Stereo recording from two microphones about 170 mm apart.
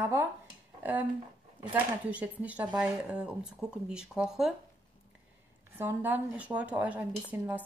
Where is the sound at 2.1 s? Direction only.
10° right (ahead or behind).